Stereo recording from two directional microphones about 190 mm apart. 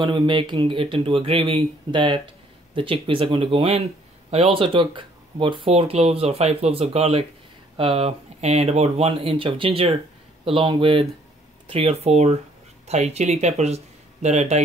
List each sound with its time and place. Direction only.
0.0 s speech: 25° right (ahead or behind)